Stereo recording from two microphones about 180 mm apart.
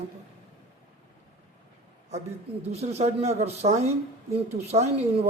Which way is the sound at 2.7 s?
35° right (ahead or behind).